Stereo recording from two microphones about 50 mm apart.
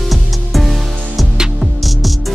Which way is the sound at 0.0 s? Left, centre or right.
Centre.